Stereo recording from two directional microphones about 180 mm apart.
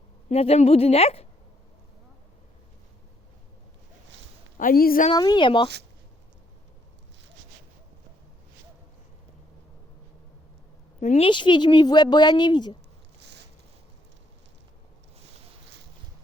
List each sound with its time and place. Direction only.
0.3 s a woman's voice: 35° left (ahead or behind)
4.5 s a woman's voice: 50° left (ahead or behind)
5.1 s speech: 25° left (ahead or behind)
11.0 s a woman's voice: 40° left (ahead or behind)
11.3 s speech: 25° left (ahead or behind)
13.1 s a sound: 70° right (ahead or behind)